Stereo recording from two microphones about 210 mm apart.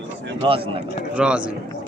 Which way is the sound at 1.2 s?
5° right (ahead or behind).